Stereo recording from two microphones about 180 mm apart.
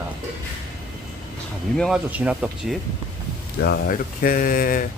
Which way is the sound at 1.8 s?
5° right (ahead or behind).